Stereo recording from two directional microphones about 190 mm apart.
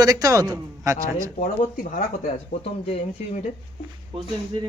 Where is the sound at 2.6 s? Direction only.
30° left (ahead or behind).